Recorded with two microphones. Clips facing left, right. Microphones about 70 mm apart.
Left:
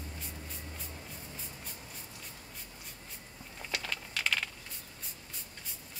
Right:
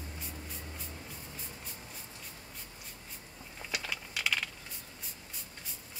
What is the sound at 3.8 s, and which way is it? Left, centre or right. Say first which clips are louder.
Computer keyboard: even; centre.